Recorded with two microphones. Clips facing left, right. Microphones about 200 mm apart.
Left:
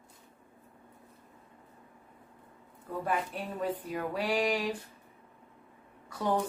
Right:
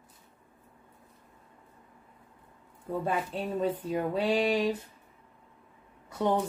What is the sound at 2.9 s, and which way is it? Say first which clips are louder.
Speech: right 2 dB; 25° right (ahead or behind).